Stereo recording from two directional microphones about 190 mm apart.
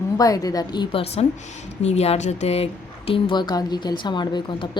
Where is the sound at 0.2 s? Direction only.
20° left (ahead or behind).